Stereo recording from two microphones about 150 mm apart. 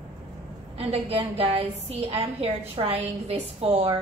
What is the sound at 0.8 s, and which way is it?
A woman's voice, 40° right (ahead or behind).